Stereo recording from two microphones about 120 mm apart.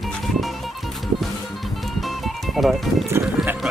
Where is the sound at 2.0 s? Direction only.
Centre (ahead or behind).